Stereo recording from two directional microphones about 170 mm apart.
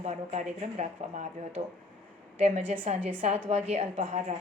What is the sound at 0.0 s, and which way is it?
A woman's voice, 40° right (ahead or behind).